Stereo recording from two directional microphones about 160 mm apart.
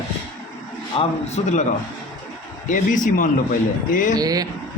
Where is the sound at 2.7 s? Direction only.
55° left (ahead or behind).